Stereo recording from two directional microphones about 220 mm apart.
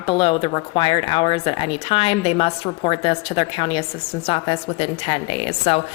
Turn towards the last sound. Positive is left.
turn(degrees=25)  # may be behind; listen again after turning